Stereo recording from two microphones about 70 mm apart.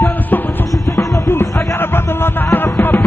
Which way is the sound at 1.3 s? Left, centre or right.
Left.